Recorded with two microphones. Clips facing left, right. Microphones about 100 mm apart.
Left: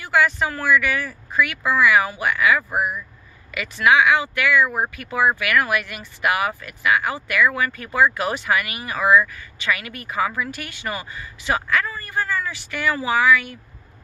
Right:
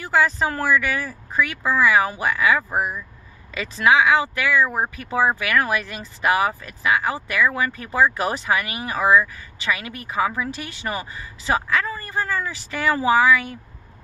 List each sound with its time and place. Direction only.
0.0 s speech: 30° right (ahead or behind)